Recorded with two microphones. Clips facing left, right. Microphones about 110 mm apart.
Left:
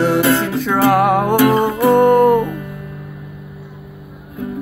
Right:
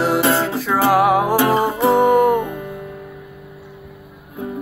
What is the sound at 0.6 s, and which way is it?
Music, 5° right (ahead or behind).